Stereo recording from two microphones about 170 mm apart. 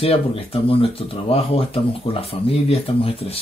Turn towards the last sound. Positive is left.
turn(degrees=35)  # may be behind; listen again after turning